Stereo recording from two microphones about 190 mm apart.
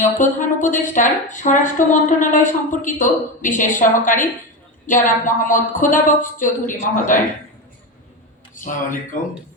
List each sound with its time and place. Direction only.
0.2 s a woman's voice: 40° left (ahead or behind)
8.5 s speech: 45° left (ahead or behind)